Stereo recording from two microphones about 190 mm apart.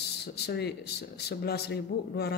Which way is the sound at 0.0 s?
60° left (ahead or behind).